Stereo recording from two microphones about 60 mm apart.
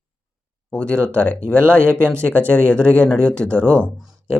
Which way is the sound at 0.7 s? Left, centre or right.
Centre.